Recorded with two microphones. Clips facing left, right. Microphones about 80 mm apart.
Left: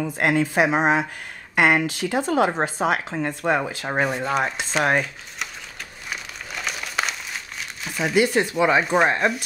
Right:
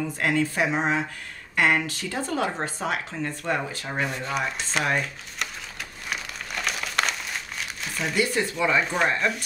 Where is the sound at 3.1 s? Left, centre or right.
Left.